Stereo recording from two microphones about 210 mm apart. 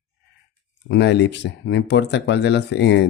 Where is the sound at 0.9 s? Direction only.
55° left (ahead or behind).